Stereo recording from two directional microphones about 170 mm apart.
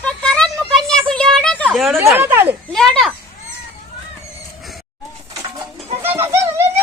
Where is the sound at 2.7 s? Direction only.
Centre (ahead or behind).